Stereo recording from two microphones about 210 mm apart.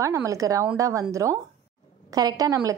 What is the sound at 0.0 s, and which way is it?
A woman's voice, 15° right (ahead or behind).